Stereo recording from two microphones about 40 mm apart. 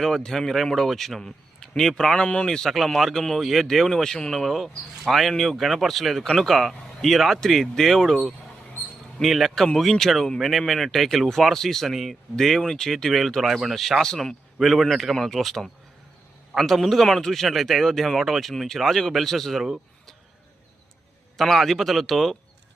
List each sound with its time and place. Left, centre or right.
0.3 s a man's voice: centre
1.2 s a sound: centre
2.0 s speech: centre
2.2 s speech: left
2.6 s a man's voice: centre
9.2 s a man's voice: centre
21.3 s a man's voice: centre